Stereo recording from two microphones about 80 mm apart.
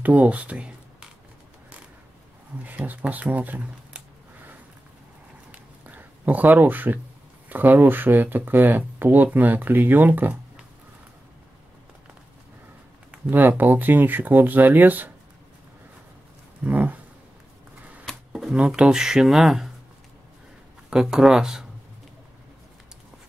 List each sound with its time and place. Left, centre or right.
0.0 s speech: centre
2.6 s speech: right
5.5 s a sound: right
7.4 s speech: right
13.3 s speech: right
16.6 s speech: centre
18.0 s speech: centre
20.9 s speech: centre